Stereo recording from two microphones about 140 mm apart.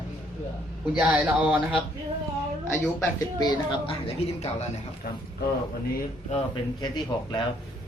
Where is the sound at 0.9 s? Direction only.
10° right (ahead or behind).